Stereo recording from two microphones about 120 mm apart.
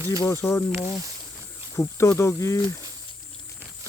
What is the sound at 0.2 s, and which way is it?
Speech, 25° left (ahead or behind).